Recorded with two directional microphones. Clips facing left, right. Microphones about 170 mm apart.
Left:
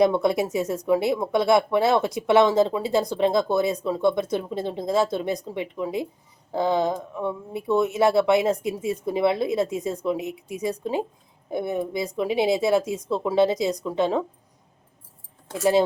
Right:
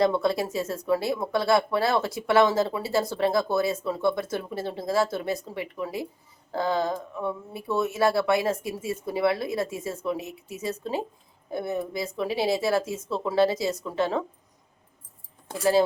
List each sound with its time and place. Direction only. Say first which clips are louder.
0.0 s speech: left 3 dB; 20° left (ahead or behind)
15.5 s speech: left 2 dB; 20° left (ahead or behind)